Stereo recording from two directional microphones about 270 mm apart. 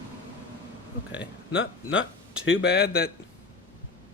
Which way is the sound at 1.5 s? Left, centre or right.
Left.